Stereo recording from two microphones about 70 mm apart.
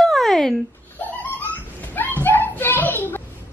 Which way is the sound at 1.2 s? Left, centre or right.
Left.